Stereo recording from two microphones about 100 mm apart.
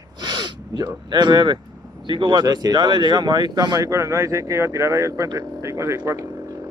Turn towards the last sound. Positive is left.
turn(degrees=-30)  # may be behind; listen again after turning